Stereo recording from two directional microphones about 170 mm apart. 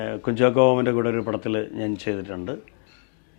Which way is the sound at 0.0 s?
15° left (ahead or behind).